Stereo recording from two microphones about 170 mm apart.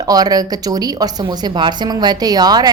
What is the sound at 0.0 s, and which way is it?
Speech, 20° right (ahead or behind).